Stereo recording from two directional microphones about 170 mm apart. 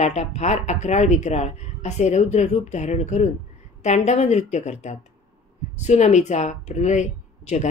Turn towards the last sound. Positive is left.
turn(degrees=45)  # may be behind; listen again after turning